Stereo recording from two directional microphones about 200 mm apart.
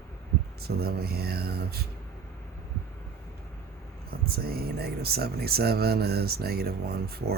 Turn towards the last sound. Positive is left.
turn(degrees=-50)  # may be behind; listen again after turning